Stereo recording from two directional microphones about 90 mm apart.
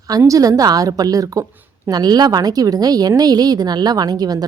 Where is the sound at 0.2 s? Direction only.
40° right (ahead or behind).